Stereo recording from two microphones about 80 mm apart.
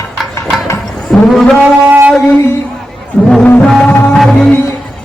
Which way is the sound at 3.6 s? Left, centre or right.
Centre.